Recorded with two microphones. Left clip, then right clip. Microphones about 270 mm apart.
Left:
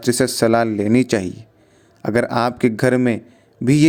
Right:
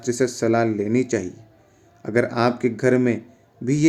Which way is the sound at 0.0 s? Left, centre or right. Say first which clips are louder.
Left 5 dB; left.